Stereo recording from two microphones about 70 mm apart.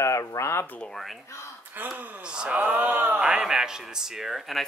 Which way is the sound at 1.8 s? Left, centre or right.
Right.